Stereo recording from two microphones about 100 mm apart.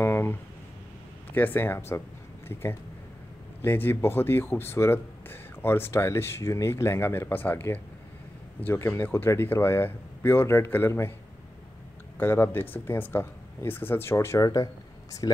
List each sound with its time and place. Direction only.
0.0 s a sound: 20° left (ahead or behind)
1.3 s speech: 20° left (ahead or behind)
12.2 s speech: 20° left (ahead or behind); by 15.4 s 40° left (ahead or behind)